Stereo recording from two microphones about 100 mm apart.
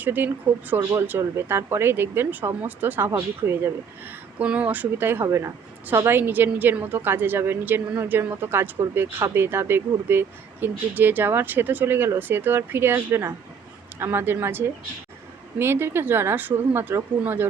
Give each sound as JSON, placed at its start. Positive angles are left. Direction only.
{"t": 0.0, "sound": "speech", "side_deg": -20}
{"t": 4.4, "sound": "speech", "side_deg": -15}